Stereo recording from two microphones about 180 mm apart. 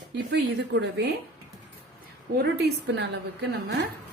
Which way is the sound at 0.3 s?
75° right (ahead or behind).